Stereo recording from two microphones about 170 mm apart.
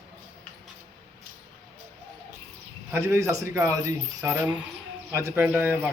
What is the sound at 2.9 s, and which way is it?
Speech, 15° right (ahead or behind).